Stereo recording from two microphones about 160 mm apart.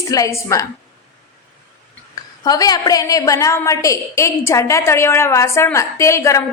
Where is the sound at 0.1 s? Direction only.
20° left (ahead or behind).